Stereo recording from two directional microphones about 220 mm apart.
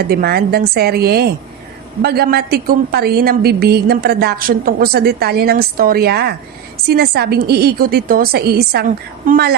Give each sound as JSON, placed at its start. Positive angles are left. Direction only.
{"t": 0.1, "sound": "a woman's voice", "side_deg": -45}